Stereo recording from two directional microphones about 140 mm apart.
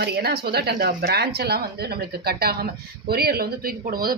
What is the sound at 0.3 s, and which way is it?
Speech, 90° right.